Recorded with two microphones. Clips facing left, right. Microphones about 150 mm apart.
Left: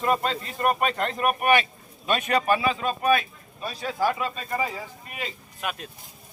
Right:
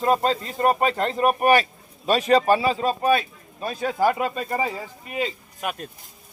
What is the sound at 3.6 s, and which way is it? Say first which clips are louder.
Speech: right 4 dB; 45° right (ahead or behind).